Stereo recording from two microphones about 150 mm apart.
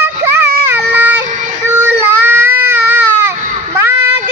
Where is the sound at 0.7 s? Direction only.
10° right (ahead or behind).